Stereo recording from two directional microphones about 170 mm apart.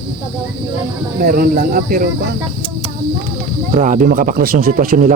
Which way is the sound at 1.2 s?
60° right (ahead or behind).